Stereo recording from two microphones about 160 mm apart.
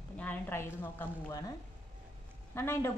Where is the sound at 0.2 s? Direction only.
15° left (ahead or behind).